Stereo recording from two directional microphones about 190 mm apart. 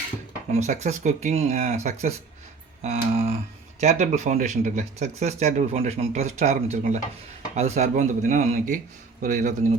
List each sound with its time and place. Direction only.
0.5 s speech: 35° right (ahead or behind)